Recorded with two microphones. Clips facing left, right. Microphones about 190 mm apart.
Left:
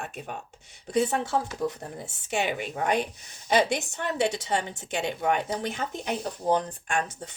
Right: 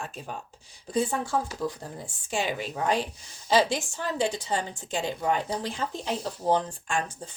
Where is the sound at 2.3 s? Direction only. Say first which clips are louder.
Left 1 dB; 65° left (ahead or behind).